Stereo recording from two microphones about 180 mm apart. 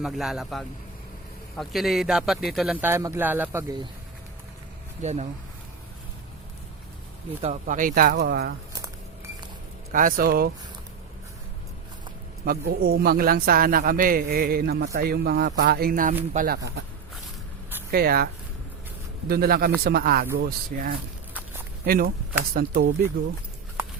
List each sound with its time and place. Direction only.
0.0 s speech: centre (ahead or behind)
2.8 s speech: 15° right (ahead or behind)
5.0 s speech: 40° right (ahead or behind)
7.4 s speech: 45° right (ahead or behind); by 8.5 s 60° right (ahead or behind)
9.9 s speech: 50° right (ahead or behind)
12.5 s a man's voice: 55° right (ahead or behind)
17.9 s a man's voice: 55° right (ahead or behind)
19.3 s a man's voice: 60° right (ahead or behind)